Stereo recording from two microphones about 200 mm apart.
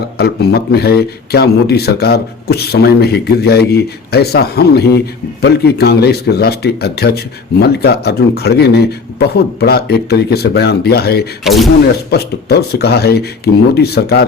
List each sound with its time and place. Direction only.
0.2 s speech: 55° left (ahead or behind)
11.4 s speech: centre (ahead or behind)
12.1 s speech: 55° left (ahead or behind)